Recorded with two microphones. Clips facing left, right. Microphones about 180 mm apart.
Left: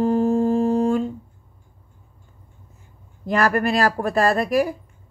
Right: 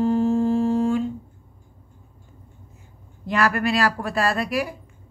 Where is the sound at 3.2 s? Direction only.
40° left (ahead or behind).